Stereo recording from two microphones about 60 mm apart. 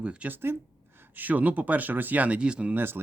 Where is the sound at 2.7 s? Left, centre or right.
Right.